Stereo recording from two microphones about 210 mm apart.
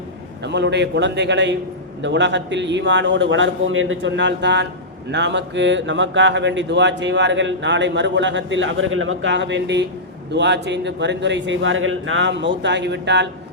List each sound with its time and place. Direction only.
0.4 s speech: 55° right (ahead or behind)